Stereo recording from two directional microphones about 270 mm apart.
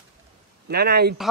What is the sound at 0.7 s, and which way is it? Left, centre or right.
Speech, right.